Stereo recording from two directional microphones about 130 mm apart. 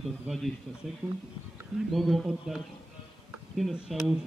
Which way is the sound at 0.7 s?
5° right (ahead or behind).